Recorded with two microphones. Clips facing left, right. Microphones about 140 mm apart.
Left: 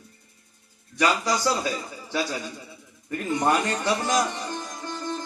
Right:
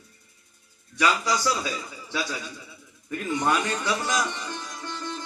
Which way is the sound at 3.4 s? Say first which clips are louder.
Left 3 dB; 40° left (ahead or behind).